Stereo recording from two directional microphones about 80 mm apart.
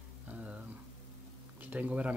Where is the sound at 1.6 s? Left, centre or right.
Centre.